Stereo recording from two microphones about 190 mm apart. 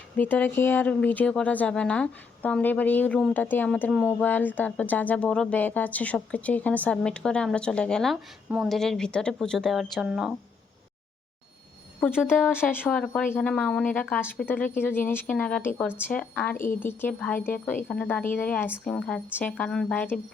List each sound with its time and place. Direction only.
0.2 s speech: 10° left (ahead or behind)
11.9 s speech: 10° left (ahead or behind)